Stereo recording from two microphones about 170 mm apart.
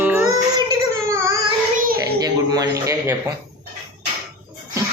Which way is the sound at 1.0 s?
15° right (ahead or behind).